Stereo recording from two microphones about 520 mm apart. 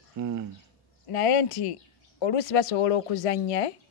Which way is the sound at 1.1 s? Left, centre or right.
Left.